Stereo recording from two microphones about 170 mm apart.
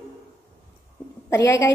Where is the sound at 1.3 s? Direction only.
15° left (ahead or behind).